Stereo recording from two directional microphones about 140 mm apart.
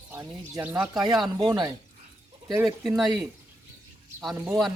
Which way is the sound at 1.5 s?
30° right (ahead or behind).